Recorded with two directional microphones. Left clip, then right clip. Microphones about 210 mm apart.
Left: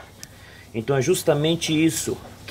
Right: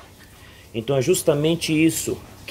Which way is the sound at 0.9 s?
25° right (ahead or behind).